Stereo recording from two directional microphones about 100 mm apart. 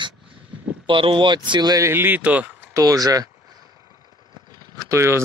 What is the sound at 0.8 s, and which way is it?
Speech, 60° right (ahead or behind).